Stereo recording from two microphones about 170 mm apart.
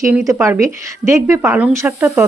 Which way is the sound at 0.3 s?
15° right (ahead or behind).